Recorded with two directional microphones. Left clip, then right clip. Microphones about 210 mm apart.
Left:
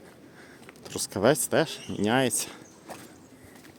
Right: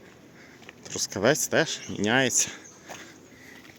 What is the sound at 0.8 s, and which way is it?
Speech, 10° left (ahead or behind).